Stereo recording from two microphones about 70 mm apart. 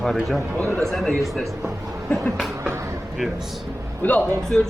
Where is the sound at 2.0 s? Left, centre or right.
Centre.